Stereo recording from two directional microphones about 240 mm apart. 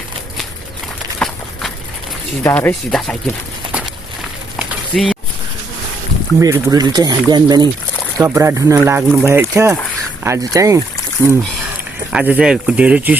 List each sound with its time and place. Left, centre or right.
1.2 s walk: centre
2.4 s speech: centre
4.5 s a sound: centre
6.4 s speech: centre